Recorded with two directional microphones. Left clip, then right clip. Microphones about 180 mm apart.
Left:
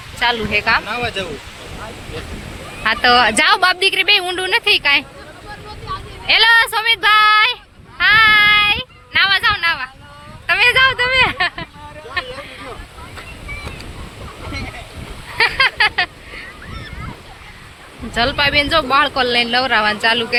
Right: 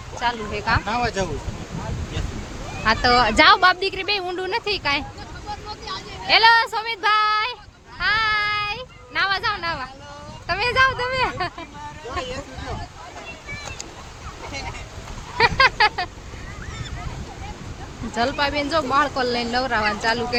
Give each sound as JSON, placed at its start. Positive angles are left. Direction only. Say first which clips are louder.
{"t": 0.2, "sound": "speech", "louder": "left 8 dB", "side_deg": 0}
{"t": 0.9, "sound": "speech", "louder": "left 2 dB", "side_deg": -65}
{"t": 2.8, "sound": "speech", "louder": "left 5 dB", "side_deg": -5}
{"t": 6.2, "sound": "speech", "louder": "left 4 dB", "side_deg": 0}
{"t": 15.4, "sound": "vehicle", "louder": "left 2 dB", "side_deg": -5}
{"t": 18.1, "sound": "speech", "louder": "left 7 dB", "side_deg": -5}